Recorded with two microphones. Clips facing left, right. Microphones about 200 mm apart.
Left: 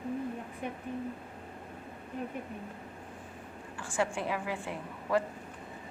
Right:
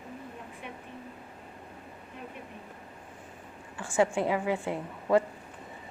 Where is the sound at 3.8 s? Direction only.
25° right (ahead or behind).